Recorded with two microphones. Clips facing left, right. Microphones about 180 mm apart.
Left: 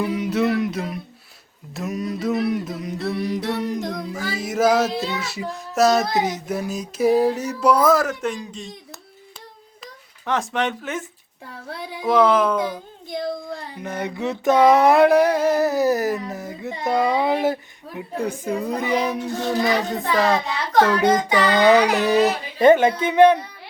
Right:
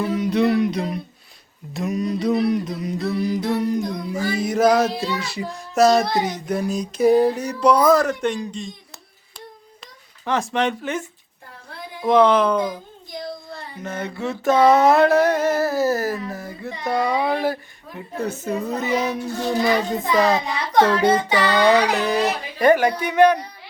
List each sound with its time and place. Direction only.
0.0 s a sound: 10° left (ahead or behind)
1.7 s child singing: centre (ahead or behind)
9.8 s a child's voice: centre (ahead or behind)
12.0 s child singing: 5° left (ahead or behind)
13.8 s a sound: 15° left (ahead or behind)
19.5 s child singing: centre (ahead or behind)
20.9 s music: 30° right (ahead or behind)
21.6 s speech: 15° left (ahead or behind)